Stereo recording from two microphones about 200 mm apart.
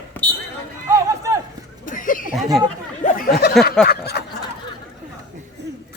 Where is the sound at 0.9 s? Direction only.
15° right (ahead or behind).